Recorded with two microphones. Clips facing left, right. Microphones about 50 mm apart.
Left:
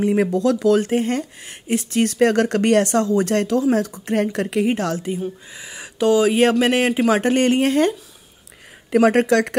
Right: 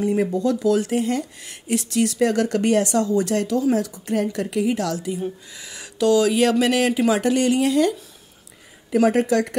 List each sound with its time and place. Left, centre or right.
0.0 s a woman's voice: left
5.5 s a woman's voice: left
8.9 s speech: left